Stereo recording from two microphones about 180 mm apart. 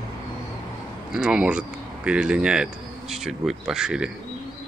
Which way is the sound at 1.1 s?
5° right (ahead or behind).